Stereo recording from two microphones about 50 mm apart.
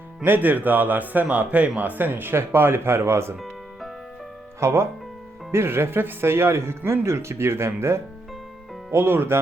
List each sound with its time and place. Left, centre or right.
0.3 s speech: right
3.4 s music: centre
4.6 s speech: right
5.5 s speech: right